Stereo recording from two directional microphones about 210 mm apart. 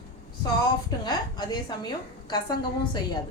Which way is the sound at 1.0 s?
20° left (ahead or behind).